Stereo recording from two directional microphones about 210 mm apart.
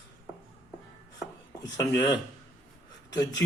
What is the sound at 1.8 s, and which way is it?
Speech, 15° left (ahead or behind).